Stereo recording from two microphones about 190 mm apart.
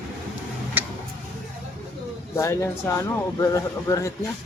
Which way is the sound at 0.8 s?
10° right (ahead or behind).